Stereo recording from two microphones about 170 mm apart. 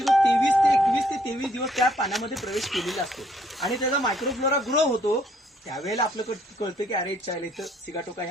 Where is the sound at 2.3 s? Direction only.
Centre (ahead or behind).